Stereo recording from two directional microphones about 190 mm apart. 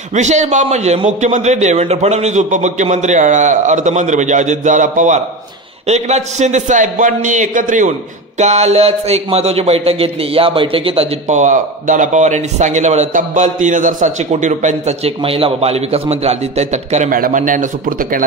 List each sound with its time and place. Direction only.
0.1 s speech: 40° right (ahead or behind)